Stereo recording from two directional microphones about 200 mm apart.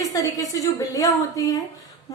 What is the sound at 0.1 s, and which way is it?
A woman's voice, 15° left (ahead or behind).